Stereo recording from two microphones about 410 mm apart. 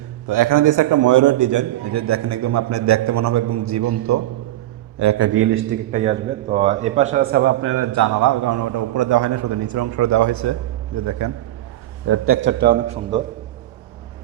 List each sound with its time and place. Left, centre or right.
0.3 s a man's voice: right
12.0 s a man's voice: right; by 13.2 s centre